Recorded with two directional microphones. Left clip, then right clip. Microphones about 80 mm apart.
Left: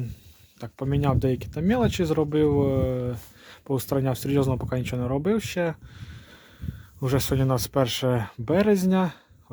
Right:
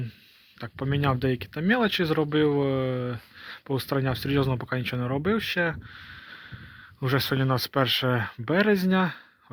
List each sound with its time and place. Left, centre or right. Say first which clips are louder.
0.6 s speech: even; left
3.4 s a sound: left 1 dB; left
3.9 s speech: left 2 dB; left
4.9 s speech: left 2 dB; left